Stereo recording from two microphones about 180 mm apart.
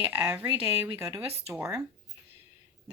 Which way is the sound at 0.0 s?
10° right (ahead or behind).